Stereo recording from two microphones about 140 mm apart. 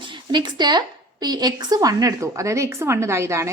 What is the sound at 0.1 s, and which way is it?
A woman's voice, 35° right (ahead or behind).